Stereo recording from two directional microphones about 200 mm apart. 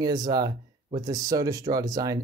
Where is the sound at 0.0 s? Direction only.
20° right (ahead or behind).